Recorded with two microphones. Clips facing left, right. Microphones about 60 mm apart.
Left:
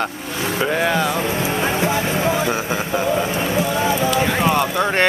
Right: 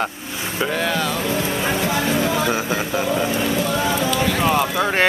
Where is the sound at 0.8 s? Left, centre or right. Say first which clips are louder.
Left 3 dB; centre.